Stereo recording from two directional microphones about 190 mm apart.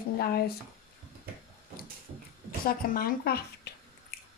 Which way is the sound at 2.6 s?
50° left (ahead or behind).